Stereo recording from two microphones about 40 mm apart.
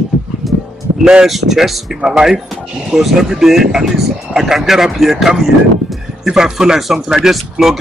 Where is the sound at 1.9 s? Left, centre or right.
Centre.